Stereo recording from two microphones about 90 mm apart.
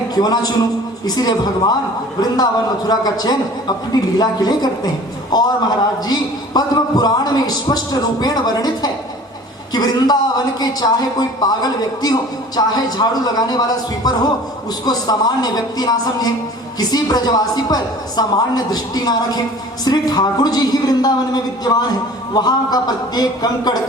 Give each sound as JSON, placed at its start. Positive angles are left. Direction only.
{"t": 0.1, "sound": "a man's voice", "side_deg": 50}